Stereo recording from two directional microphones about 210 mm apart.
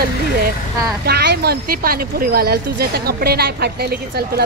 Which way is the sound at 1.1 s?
50° right (ahead or behind).